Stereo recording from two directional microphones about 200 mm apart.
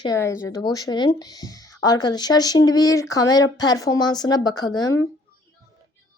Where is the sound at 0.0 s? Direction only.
15° left (ahead or behind).